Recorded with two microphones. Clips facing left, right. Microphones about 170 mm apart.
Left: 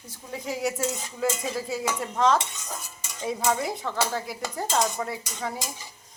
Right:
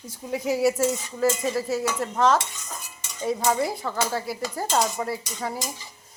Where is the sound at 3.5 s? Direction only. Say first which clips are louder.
Right 2 dB; 5° right (ahead or behind).